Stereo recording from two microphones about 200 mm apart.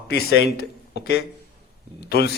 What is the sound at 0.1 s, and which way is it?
Speech, 55° left (ahead or behind).